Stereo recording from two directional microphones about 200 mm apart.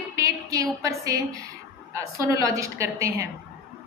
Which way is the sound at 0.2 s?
15° right (ahead or behind).